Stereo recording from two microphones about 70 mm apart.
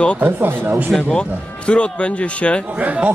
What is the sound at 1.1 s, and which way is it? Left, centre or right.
Speech, centre.